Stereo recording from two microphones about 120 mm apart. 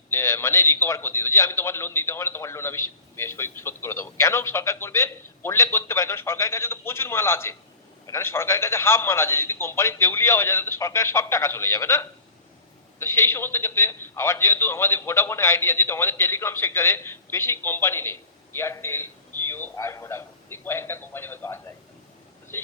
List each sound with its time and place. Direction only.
0.1 s a man's voice: 20° left (ahead or behind)